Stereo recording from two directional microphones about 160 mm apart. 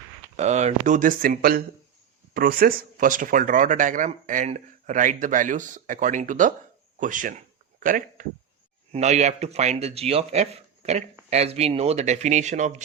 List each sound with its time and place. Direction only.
0.3 s speech: 45° right (ahead or behind)
8.9 s speech: 45° right (ahead or behind)